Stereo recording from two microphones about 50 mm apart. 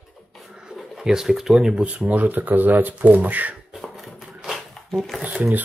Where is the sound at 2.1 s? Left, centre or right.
Right.